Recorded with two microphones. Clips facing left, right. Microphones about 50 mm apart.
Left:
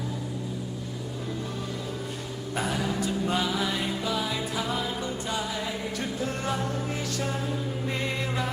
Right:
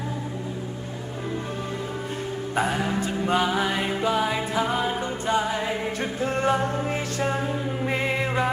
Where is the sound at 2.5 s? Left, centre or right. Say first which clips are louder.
Right 4 dB; right.